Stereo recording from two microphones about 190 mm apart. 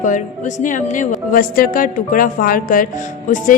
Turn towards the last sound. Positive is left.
turn(degrees=45)  # may be behind; listen again after turning